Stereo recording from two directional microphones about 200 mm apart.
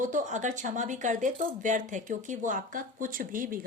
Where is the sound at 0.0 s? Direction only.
40° right (ahead or behind).